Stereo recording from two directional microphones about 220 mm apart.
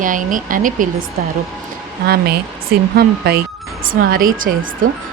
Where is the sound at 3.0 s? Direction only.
45° right (ahead or behind).